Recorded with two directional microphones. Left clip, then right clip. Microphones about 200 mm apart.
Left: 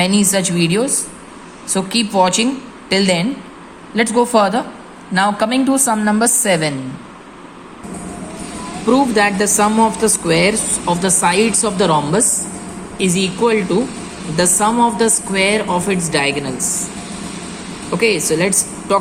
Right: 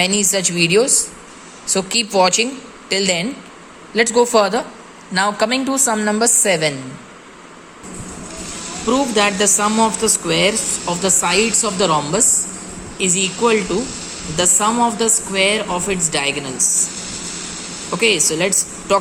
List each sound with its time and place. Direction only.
0.0 s a woman's voice: 15° right (ahead or behind)
8.9 s speech: 5° right (ahead or behind)
17.9 s a woman's voice: 10° right (ahead or behind)